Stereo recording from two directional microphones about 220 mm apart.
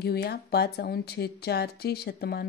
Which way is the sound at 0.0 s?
45° left (ahead or behind).